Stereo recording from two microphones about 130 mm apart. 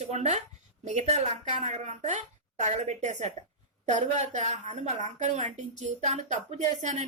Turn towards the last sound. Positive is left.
turn(degrees=-65)  # may be behind; listen again after turning